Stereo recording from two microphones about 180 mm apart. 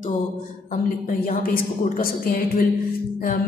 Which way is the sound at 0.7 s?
45° left (ahead or behind).